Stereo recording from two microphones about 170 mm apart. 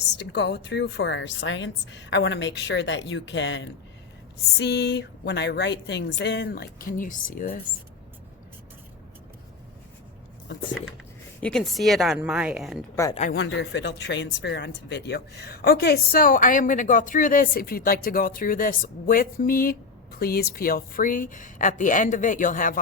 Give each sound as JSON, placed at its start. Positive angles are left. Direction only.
{"t": 0.2, "sound": "a woman's voice", "side_deg": 80}
{"t": 11.3, "sound": "a woman's voice", "side_deg": 5}
{"t": 13.3, "sound": "speech", "side_deg": 90}